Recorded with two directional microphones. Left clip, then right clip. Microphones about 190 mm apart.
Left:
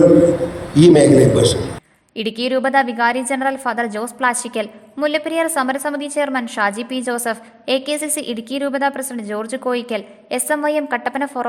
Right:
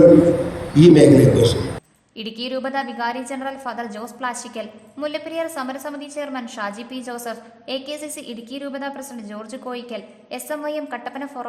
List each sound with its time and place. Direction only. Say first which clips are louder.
0.7 s a man's voice: left 1 dB; 25° left (ahead or behind); by 11.4 s 40° left (ahead or behind)